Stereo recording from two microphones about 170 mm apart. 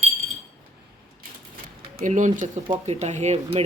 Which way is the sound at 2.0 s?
45° right (ahead or behind).